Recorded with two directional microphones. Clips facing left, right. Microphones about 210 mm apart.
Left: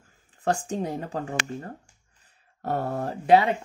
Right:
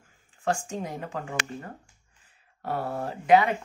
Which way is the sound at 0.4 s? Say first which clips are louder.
Left 3 dB; 35° left (ahead or behind).